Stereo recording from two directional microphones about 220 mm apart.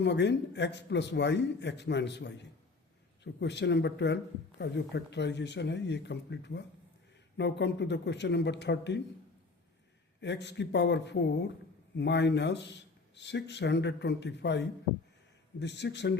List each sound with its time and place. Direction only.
0.0 s speech: 50° left (ahead or behind)
10.2 s speech: 50° left (ahead or behind)